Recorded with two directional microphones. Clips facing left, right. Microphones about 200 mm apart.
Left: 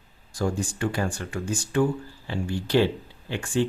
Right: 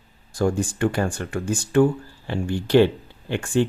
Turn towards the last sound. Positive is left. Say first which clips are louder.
# right 4 dB
turn(degrees=-55)  # may be behind; listen again after turning